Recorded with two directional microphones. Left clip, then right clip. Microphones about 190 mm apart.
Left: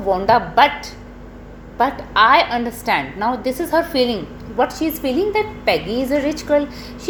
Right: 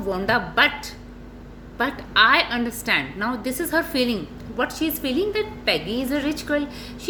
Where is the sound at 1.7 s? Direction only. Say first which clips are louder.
Left 4 dB; 20° right (ahead or behind).